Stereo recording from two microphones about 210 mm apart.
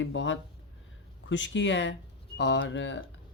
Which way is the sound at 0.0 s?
60° left (ahead or behind).